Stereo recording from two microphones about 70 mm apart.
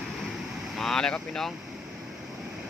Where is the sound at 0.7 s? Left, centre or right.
Centre.